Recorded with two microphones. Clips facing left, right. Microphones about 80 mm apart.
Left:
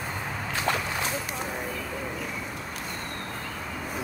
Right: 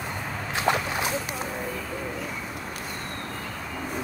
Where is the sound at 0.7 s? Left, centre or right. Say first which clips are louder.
Right 4 dB; centre.